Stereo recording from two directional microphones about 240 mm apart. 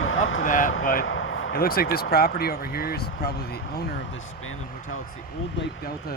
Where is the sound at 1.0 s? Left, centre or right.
Left.